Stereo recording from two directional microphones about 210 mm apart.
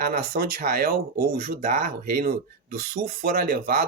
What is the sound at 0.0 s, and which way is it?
Speech, 45° right (ahead or behind).